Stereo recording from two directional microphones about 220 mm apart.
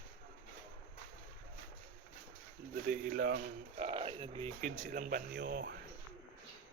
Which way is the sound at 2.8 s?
40° right (ahead or behind).